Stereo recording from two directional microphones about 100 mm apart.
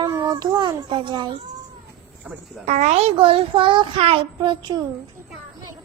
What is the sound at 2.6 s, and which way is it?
A child's voice, 90° right.